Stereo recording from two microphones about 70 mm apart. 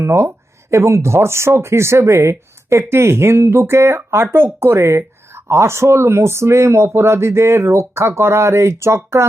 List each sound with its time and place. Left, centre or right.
0.0 s speech: right